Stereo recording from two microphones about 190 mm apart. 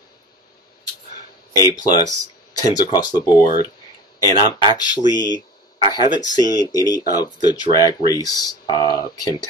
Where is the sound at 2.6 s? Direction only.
20° left (ahead or behind).